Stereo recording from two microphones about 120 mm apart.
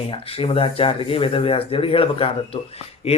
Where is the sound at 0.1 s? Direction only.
55° left (ahead or behind).